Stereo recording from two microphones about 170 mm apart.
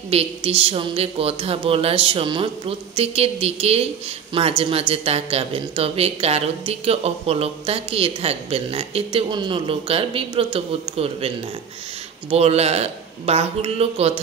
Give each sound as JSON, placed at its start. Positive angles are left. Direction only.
{"t": 0.1, "sound": "a woman's voice", "side_deg": -35}